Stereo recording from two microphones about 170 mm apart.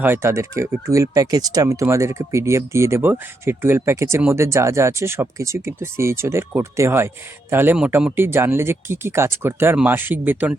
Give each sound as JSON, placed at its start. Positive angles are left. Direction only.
{"t": 0.0, "sound": "speech", "side_deg": -15}